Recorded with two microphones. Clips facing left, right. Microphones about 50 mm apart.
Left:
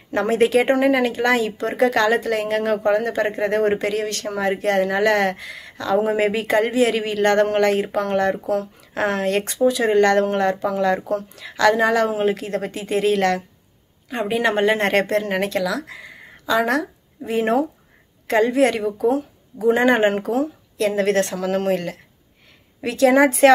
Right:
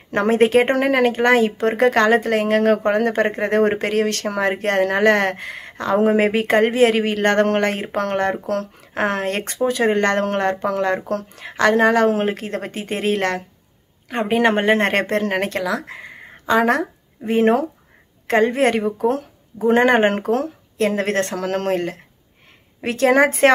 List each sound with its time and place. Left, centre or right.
0.1 s speech: right
0.7 s speech: right
8.5 s speech: right
8.9 s speech: right
20.7 s speech: right